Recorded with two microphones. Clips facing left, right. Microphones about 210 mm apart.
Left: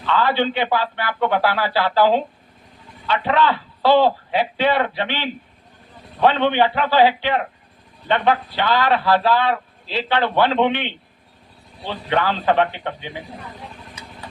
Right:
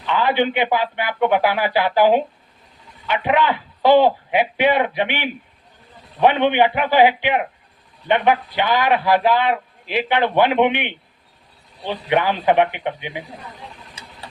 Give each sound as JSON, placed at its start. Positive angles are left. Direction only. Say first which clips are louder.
{"t": 0.0, "sound": "a man's voice", "louder": "right 1 dB", "side_deg": -15}